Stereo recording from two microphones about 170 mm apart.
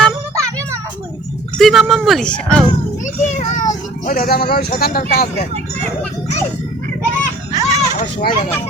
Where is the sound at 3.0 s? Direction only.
45° left (ahead or behind).